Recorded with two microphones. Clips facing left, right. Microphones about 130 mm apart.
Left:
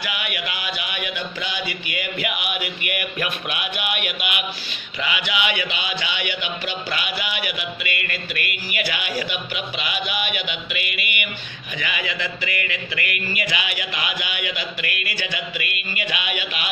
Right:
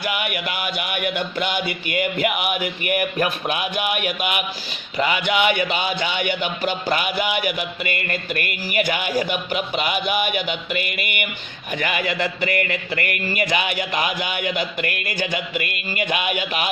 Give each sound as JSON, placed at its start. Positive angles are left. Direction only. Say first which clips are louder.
{"t": 0.0, "sound": "music", "louder": "right 4 dB", "side_deg": -45}
{"t": 1.7, "sound": "speech", "louder": "right 6 dB", "side_deg": -45}
{"t": 4.9, "sound": "music", "louder": "right 6 dB", "side_deg": -45}